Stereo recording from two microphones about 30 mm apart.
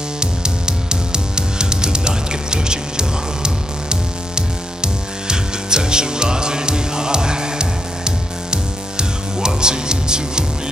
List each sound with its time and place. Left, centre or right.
0.2 s music: right